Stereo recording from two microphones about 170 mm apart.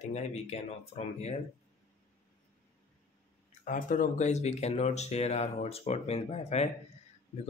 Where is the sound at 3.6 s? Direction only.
50° left (ahead or behind).